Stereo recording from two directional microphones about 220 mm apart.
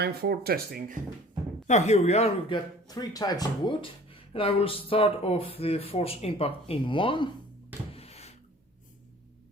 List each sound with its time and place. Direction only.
0.0 s speech: 45° right (ahead or behind)
1.6 s speech: 30° left (ahead or behind)
2.8 s speech: 15° left (ahead or behind)
7.9 s a sound: 30° left (ahead or behind)